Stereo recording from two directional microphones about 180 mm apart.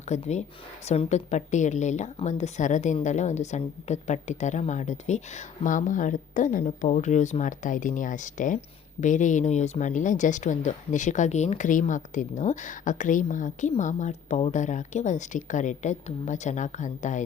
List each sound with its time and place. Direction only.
0.1 s a woman's voice: 40° left (ahead or behind)